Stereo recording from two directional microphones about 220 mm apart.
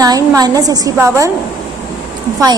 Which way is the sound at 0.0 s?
15° right (ahead or behind).